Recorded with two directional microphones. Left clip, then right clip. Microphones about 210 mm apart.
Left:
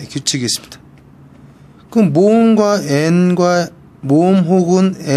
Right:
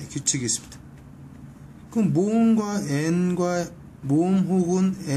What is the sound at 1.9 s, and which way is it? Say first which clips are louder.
Speech: left 13 dB; 45° left (ahead or behind).